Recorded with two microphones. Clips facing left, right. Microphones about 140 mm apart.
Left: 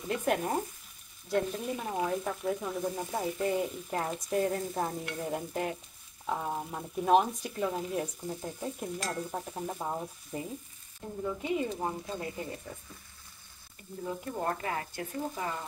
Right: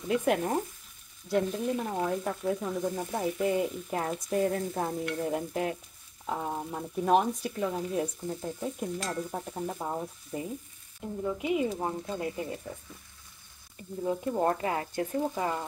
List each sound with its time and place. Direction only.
0.1 s frying: 5° right (ahead or behind)
1.7 s frying: 5° left (ahead or behind)
11.0 s speech: 10° right (ahead or behind)
14.0 s speech: 25° right (ahead or behind)